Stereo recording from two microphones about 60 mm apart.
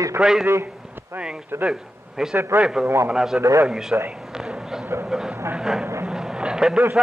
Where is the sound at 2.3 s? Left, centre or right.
Right.